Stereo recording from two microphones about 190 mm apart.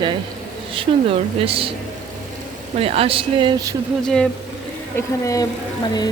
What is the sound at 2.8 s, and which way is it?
Speech, 30° right (ahead or behind).